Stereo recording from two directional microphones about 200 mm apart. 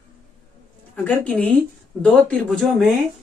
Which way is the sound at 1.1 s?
5° left (ahead or behind).